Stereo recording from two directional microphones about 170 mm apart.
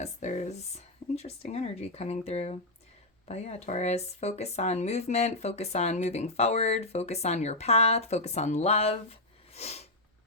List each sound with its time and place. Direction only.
0.0 s speech: 45° left (ahead or behind)